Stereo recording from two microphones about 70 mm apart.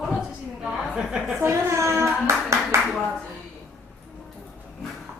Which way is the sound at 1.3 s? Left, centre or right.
Right.